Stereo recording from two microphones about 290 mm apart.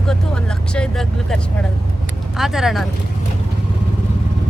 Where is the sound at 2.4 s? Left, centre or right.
Centre.